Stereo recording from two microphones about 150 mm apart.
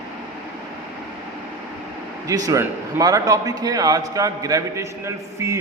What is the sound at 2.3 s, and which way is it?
A man's voice, 25° right (ahead or behind).